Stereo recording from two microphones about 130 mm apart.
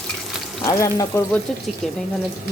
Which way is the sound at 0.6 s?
25° left (ahead or behind).